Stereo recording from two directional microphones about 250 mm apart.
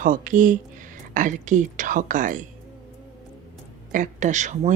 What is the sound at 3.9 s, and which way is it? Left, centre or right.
Speech, right.